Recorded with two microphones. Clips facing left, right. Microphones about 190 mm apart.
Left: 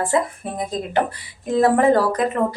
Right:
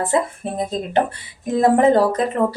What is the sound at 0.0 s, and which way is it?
Speech, 25° right (ahead or behind).